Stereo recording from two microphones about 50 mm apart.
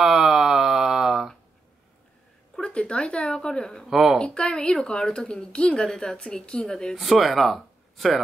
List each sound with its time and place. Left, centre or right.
0.0 s a sound: centre
2.5 s a sound: centre
3.3 s speech: centre
3.8 s speech: centre
4.2 s speech: left
7.0 s speech: centre